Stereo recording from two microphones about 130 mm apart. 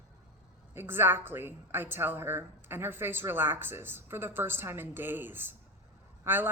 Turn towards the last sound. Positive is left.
turn(degrees=-15)  # may be behind; listen again after turning